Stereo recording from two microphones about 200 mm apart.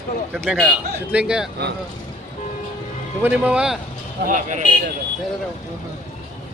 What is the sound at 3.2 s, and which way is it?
Speech, 5° right (ahead or behind).